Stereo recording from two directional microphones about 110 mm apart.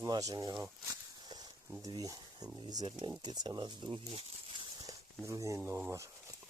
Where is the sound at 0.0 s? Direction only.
30° right (ahead or behind).